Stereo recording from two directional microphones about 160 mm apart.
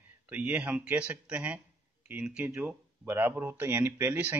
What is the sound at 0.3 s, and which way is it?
Speech, 10° right (ahead or behind).